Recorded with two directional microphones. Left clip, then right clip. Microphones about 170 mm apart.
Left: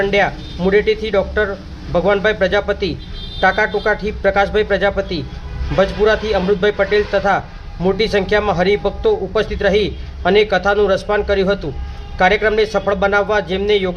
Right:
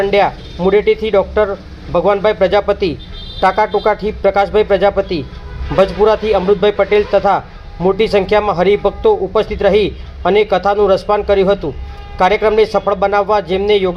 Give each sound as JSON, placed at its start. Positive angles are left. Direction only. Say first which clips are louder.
{"t": 0.6, "sound": "a man's voice", "louder": "right 3 dB", "side_deg": -20}